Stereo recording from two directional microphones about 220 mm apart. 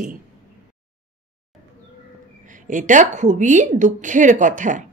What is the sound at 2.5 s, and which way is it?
A woman's voice, 35° right (ahead or behind).